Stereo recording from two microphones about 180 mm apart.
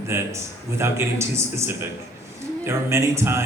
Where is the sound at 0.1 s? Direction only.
15° right (ahead or behind).